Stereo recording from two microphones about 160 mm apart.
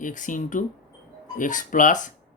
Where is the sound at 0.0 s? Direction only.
55° left (ahead or behind).